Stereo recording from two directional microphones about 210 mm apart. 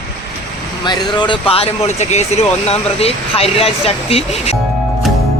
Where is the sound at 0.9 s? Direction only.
20° left (ahead or behind).